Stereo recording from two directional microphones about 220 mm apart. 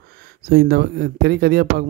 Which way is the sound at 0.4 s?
45° right (ahead or behind).